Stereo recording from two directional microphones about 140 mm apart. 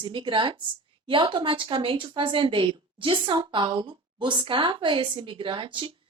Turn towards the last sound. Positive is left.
turn(degrees=-35)  # may be behind; listen again after turning